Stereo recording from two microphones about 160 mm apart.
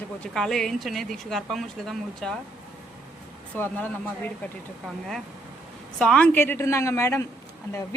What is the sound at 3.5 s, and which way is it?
Speech, 10° left (ahead or behind).